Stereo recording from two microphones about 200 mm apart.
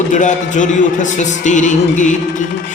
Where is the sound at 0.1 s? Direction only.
40° left (ahead or behind).